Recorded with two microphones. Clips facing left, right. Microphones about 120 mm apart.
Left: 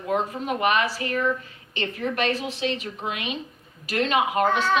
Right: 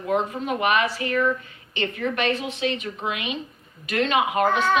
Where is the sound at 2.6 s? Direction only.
35° left (ahead or behind).